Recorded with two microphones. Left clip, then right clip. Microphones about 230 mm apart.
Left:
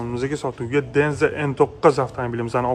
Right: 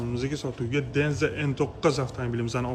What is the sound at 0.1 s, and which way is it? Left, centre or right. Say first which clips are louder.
A man's voice: left 9 dB; centre.